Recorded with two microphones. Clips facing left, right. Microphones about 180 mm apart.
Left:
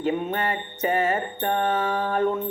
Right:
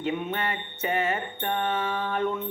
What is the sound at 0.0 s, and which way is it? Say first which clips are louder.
Music: left 4 dB; 40° left (ahead or behind).